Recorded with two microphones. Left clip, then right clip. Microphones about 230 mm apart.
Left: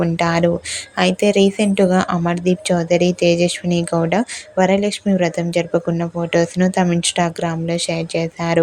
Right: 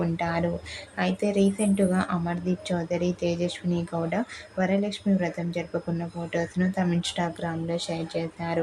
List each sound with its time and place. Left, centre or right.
0.0 s speech: left